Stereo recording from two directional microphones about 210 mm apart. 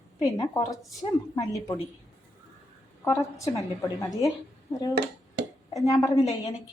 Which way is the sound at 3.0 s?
15° left (ahead or behind).